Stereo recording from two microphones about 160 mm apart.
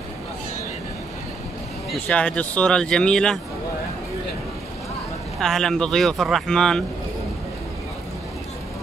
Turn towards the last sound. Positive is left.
turn(degrees=5)  # may be behind; listen again after turning